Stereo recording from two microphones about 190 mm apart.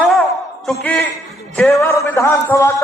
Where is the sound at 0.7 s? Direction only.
5° left (ahead or behind).